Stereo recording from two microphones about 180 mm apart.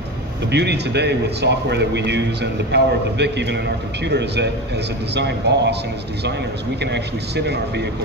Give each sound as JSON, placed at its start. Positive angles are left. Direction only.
{"t": 0.5, "sound": "a man's voice", "side_deg": -70}
{"t": 6.8, "sound": "a man's voice", "side_deg": -70}